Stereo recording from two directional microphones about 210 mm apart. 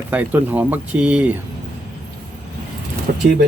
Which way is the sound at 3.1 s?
50° right (ahead or behind).